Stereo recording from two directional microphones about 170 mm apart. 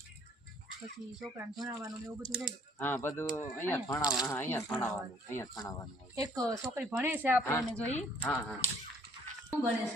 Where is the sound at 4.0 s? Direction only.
25° left (ahead or behind).